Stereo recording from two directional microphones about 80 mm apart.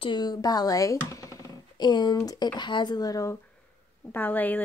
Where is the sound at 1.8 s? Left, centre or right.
Left.